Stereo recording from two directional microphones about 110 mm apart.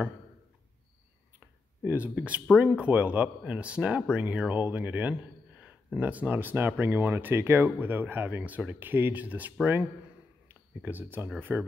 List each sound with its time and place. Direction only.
1.9 s speech: 15° right (ahead or behind)